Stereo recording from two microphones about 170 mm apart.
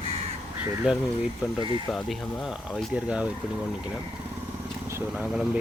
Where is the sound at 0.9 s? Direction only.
5° right (ahead or behind).